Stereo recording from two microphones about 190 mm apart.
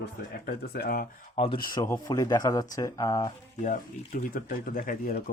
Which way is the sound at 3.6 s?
45° left (ahead or behind).